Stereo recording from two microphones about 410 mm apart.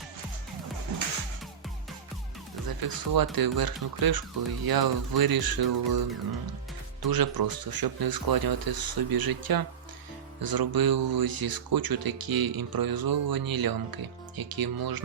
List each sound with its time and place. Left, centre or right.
2.6 s speech: right